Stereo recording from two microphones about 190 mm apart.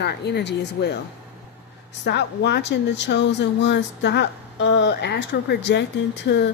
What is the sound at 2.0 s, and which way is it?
A woman's voice, 65° left (ahead or behind).